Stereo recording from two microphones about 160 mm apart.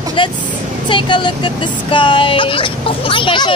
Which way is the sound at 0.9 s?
30° left (ahead or behind).